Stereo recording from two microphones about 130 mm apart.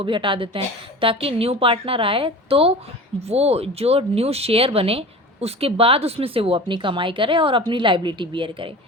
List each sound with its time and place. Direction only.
0.0 s speech: 40° right (ahead or behind)